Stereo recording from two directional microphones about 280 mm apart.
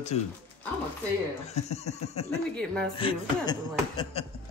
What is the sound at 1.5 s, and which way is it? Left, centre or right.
Speech, left.